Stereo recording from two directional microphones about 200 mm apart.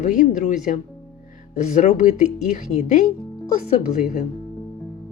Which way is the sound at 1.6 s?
35° left (ahead or behind).